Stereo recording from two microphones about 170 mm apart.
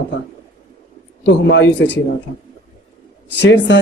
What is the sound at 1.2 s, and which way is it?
Speech, 90° left.